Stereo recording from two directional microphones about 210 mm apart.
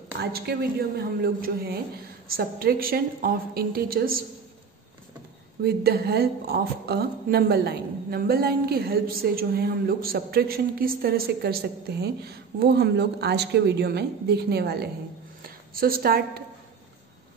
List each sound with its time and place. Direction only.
0.2 s a woman's voice: 50° right (ahead or behind)
5.6 s a woman's voice: 50° right (ahead or behind)